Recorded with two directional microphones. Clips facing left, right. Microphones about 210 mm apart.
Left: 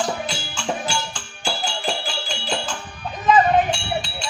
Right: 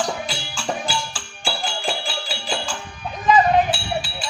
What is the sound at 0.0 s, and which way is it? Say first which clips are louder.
Music: left 1 dB; centre (ahead or behind).